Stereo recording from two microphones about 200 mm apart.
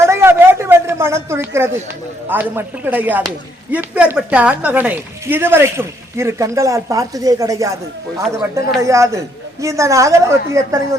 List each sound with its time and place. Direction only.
0.0 s a sound: 10° right (ahead or behind)
2.3 s speech: 10° right (ahead or behind)
8.8 s speech: 15° right (ahead or behind)